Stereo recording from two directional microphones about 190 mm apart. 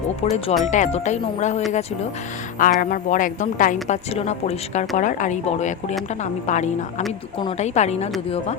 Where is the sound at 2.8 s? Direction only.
45° left (ahead or behind).